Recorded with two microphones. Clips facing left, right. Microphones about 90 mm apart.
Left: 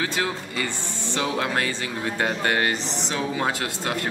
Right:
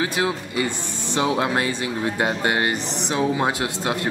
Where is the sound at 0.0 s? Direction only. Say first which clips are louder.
Right 3 dB; 15° right (ahead or behind).